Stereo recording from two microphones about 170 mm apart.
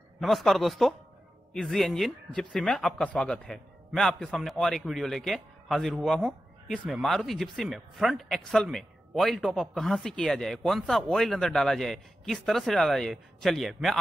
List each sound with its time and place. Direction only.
0.2 s speech: centre (ahead or behind)